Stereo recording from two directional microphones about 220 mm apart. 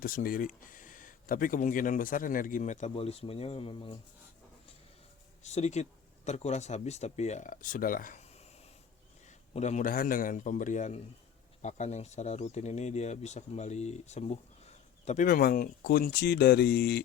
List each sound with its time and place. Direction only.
0.0 s speech: 40° left (ahead or behind); by 3.9 s 25° left (ahead or behind)
5.4 s speech: 30° left (ahead or behind)
9.5 s speech: 30° left (ahead or behind); by 17.0 s 50° left (ahead or behind)